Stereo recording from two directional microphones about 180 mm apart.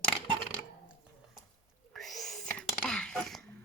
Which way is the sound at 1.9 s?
Centre (ahead or behind).